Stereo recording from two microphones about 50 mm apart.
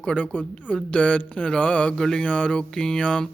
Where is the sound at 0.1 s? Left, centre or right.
Centre.